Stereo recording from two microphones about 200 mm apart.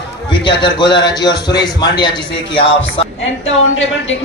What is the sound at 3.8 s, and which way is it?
Speech, 70° left (ahead or behind).